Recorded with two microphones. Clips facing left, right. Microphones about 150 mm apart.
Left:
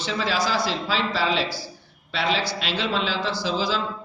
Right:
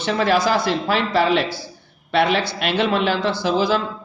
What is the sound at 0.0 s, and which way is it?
A man's voice, 60° right (ahead or behind).